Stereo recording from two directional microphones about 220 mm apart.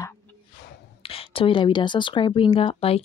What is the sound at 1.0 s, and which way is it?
A woman's voice, 25° left (ahead or behind).